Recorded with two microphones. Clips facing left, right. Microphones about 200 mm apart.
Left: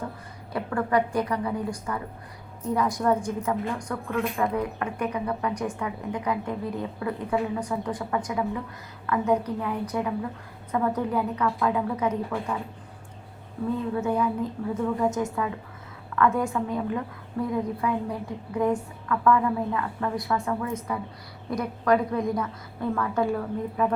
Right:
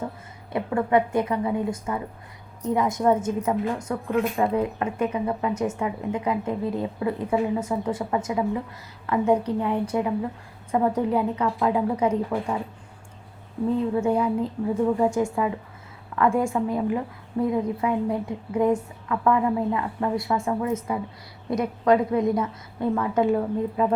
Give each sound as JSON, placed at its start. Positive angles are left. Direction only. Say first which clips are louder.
{"t": 0.5, "sound": "a woman's voice", "louder": "right 3 dB", "side_deg": -20}
{"t": 13.9, "sound": "a woman's voice", "louder": "right 3 dB", "side_deg": -25}